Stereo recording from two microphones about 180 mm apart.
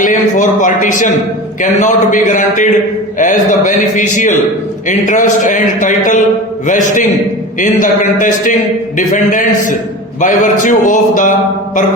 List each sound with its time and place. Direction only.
0.0 s speech: 45° left (ahead or behind)